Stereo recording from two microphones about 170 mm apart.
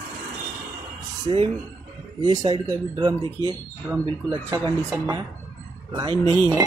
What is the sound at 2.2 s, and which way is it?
Speech, 25° right (ahead or behind).